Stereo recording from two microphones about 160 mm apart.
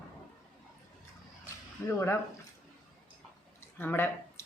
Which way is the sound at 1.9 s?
15° left (ahead or behind).